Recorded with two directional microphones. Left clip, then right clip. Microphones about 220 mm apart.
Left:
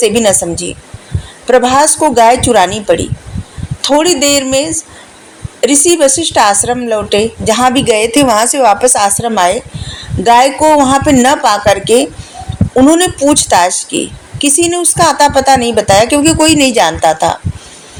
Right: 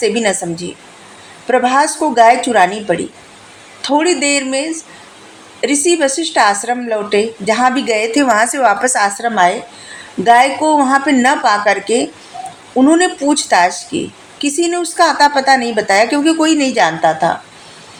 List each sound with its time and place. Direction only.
0.0 s a woman's voice: 30° left (ahead or behind)